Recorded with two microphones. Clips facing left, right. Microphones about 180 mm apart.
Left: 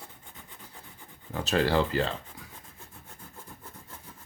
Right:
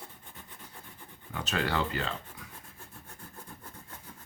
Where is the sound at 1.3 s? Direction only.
35° left (ahead or behind).